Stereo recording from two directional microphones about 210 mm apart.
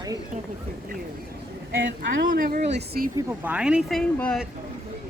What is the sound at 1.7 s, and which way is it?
Speech, 65° right (ahead or behind).